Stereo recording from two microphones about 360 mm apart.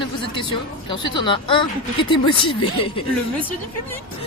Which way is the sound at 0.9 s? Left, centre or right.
Centre.